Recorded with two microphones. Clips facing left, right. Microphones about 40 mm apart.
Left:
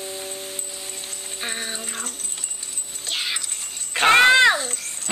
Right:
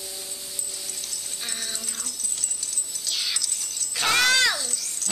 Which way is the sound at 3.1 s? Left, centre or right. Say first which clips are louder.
Left 3 dB; left.